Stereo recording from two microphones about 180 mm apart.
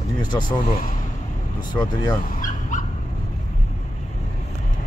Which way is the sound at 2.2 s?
50° left (ahead or behind).